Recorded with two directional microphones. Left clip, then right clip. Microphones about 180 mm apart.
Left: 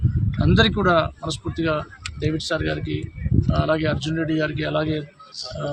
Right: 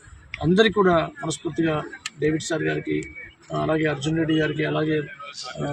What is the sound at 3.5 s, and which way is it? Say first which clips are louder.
Speech: left 1 dB; 20° left (ahead or behind).